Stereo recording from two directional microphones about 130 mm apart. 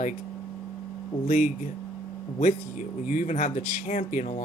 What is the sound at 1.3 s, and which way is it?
Speech, 65° left (ahead or behind).